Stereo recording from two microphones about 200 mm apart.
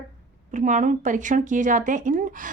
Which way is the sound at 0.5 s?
40° right (ahead or behind).